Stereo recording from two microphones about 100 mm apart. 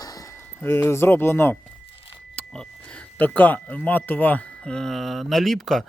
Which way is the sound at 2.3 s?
10° left (ahead or behind).